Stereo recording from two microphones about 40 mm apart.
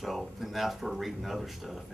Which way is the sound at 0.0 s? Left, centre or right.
Centre.